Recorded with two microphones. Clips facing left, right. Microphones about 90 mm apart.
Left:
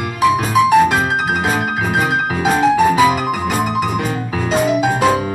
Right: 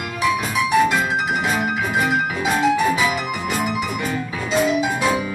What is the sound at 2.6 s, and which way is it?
Music, 40° left (ahead or behind).